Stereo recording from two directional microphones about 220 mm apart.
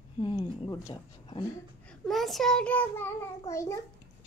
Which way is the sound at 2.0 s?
Centre (ahead or behind).